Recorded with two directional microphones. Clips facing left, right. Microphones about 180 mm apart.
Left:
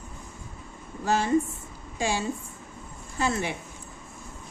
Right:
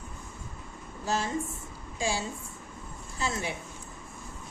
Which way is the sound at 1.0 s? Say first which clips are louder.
Left 7 dB; 65° left (ahead or behind).